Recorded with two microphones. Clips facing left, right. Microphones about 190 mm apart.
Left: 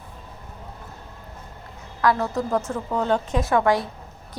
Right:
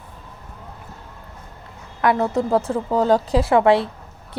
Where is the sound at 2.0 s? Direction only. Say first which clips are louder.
Right 3 dB; 25° right (ahead or behind).